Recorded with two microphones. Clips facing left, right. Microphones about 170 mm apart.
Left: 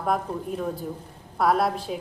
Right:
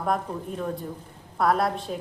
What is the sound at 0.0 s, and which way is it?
A woman's voice, 5° left (ahead or behind).